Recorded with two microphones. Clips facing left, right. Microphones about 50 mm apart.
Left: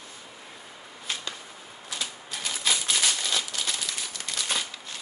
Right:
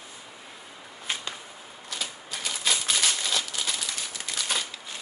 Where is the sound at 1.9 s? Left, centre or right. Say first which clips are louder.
Even; centre.